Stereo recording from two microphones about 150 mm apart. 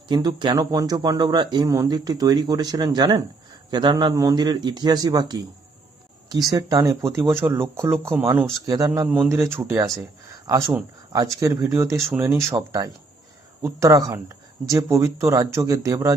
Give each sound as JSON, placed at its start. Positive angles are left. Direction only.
{"t": 0.1, "sound": "speech", "side_deg": -30}
{"t": 6.5, "sound": "speech", "side_deg": -25}
{"t": 9.0, "sound": "speech", "side_deg": -5}
{"t": 9.3, "sound": "speech", "side_deg": -20}